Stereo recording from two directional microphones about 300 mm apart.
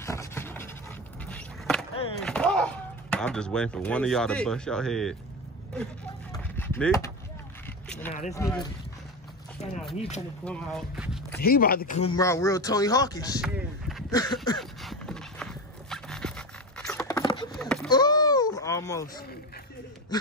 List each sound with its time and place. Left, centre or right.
0.0 s a sound: centre
1.2 s skateboard: centre
6.3 s a sound: centre
8.1 s speech: left
8.4 s speech: centre
10.4 s speech: centre
11.4 s speech: left
12.2 s speech: centre
13.4 s speech: centre
14.1 s speech: centre
14.6 s horse: centre
17.5 s a sound: centre
17.8 s a sound: centre